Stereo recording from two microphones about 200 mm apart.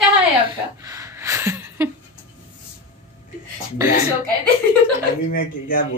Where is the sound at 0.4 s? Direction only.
15° right (ahead or behind).